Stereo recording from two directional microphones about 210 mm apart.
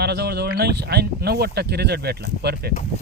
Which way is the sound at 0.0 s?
50° right (ahead or behind).